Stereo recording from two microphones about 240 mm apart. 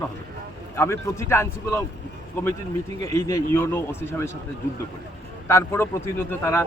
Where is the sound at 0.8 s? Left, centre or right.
Centre.